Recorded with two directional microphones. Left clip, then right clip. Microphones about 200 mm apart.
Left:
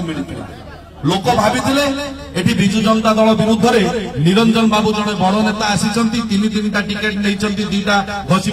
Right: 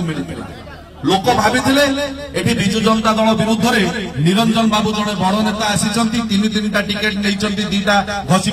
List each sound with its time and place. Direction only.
1.0 s a man's voice: 35° right (ahead or behind)